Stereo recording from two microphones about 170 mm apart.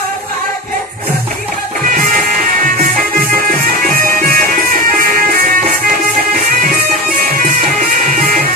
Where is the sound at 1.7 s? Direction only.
50° right (ahead or behind).